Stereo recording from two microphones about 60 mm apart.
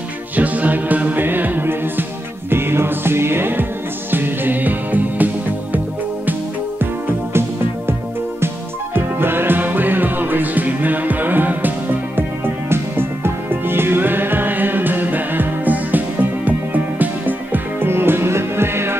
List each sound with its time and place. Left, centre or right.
0.4 s music: right
8.9 s music: right
12.6 s music: right